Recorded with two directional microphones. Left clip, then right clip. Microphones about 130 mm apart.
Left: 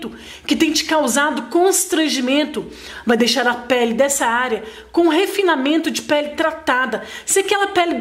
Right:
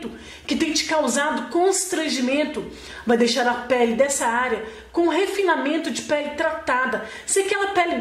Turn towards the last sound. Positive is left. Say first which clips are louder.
# left 4 dB
turn(degrees=35)  # may be behind; listen again after turning